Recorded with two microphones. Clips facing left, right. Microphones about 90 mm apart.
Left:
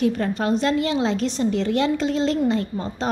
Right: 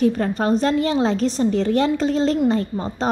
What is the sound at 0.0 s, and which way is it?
A woman's voice, 35° right (ahead or behind).